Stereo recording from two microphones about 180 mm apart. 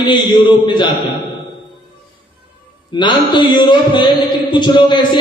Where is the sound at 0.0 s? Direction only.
25° left (ahead or behind).